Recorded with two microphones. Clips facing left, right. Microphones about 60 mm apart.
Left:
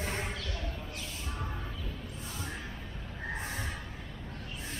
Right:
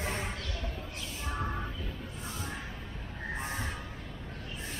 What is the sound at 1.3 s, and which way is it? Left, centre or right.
Music, right.